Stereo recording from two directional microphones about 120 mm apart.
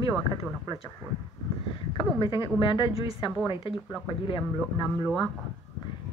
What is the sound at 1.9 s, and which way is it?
A woman's voice, 45° left (ahead or behind).